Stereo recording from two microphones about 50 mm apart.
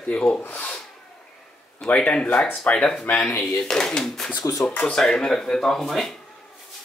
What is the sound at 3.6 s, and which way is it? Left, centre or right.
Speech, centre.